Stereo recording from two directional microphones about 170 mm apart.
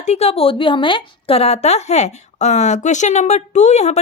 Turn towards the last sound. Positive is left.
turn(degrees=40)  # may be behind; listen again after turning